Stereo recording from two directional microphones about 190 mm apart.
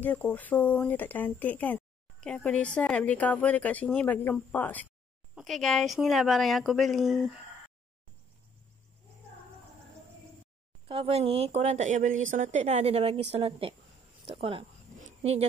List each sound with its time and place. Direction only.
0.0 s speech: 10° left (ahead or behind)
10.9 s a woman's voice: 30° right (ahead or behind)
15.0 s dog: 35° right (ahead or behind)